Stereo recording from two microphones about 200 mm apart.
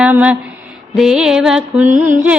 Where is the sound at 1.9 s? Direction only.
40° right (ahead or behind).